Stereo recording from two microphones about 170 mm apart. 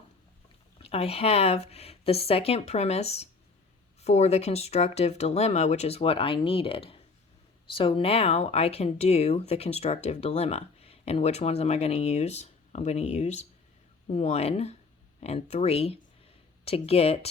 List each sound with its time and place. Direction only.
0.8 s speech: 35° left (ahead or behind)